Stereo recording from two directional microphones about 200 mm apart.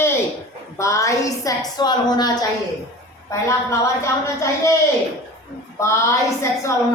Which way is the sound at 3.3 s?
15° left (ahead or behind).